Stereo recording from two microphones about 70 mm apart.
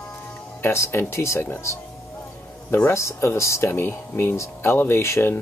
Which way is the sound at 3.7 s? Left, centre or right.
Left.